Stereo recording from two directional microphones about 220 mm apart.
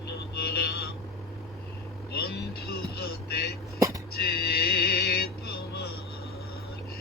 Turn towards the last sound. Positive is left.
turn(degrees=45)  # may be behind; listen again after turning